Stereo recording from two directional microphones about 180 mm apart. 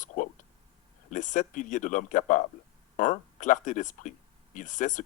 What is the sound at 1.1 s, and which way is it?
Speech, 45° left (ahead or behind).